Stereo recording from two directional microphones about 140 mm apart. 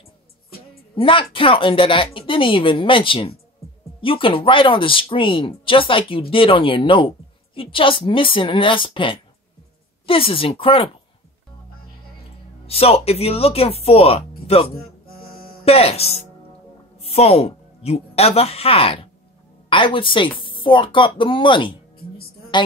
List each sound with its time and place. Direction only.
0.9 s a woman's voice: 40° left (ahead or behind)
12.6 s a woman's voice: 45° left (ahead or behind)